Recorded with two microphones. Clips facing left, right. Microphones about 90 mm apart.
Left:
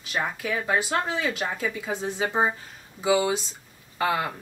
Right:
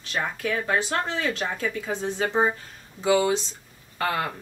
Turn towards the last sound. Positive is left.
turn(degrees=10)  # may be behind; listen again after turning